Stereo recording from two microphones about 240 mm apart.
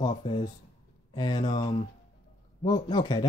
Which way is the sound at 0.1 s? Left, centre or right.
Left.